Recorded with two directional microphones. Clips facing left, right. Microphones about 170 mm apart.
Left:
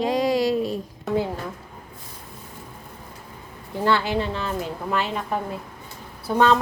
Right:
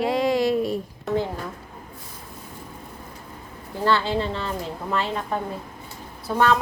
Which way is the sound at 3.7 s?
15° left (ahead or behind).